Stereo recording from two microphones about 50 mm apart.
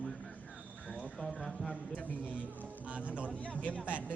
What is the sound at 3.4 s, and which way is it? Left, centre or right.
Speech, left.